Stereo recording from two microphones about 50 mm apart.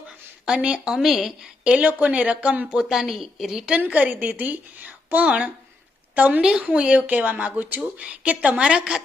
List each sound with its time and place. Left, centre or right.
0.4 s a woman's voice: right
1.0 s a woman's voice: centre
1.6 s a woman's voice: right
2.6 s a woman's voice: centre
3.9 s a woman's voice: right